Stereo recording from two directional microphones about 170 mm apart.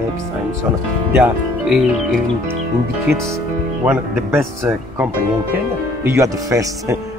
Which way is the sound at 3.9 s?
10° right (ahead or behind).